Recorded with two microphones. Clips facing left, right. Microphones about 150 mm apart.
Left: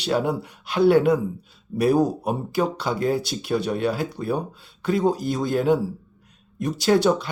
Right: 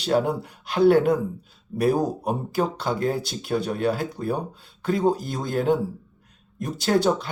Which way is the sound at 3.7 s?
45° right (ahead or behind).